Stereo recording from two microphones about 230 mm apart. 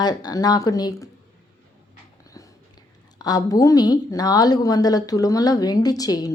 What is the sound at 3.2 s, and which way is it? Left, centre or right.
A woman's voice, centre.